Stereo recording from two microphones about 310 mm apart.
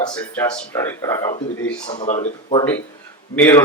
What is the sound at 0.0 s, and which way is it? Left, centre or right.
A man's voice, centre.